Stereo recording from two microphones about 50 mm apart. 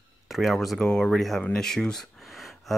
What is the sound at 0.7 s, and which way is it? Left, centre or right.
Speech, centre.